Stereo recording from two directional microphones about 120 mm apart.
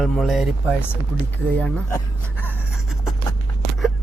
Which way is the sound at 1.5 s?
5° left (ahead or behind).